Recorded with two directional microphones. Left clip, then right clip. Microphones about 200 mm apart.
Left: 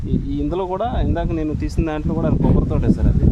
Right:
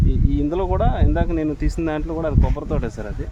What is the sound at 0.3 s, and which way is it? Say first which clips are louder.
Speech: right 1 dB; 15° left (ahead or behind).